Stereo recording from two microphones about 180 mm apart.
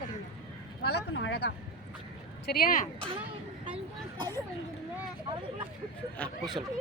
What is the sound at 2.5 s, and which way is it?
Speech, 50° left (ahead or behind).